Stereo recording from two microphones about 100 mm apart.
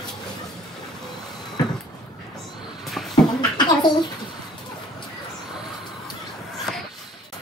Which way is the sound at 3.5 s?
45° left (ahead or behind).